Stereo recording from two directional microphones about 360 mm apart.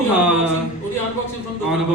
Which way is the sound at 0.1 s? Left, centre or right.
Centre.